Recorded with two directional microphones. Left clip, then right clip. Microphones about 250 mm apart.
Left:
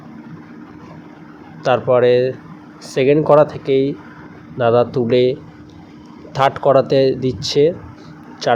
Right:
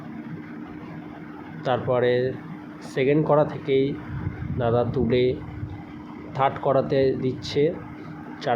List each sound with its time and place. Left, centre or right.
1.6 s speech: centre